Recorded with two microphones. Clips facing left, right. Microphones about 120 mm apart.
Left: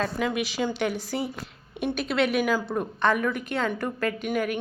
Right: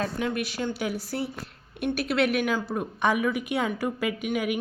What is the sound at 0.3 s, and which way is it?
Speech, 90° left.